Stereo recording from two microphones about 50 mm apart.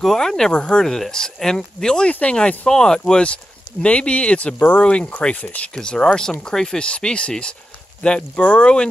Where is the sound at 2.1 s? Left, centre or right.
Left.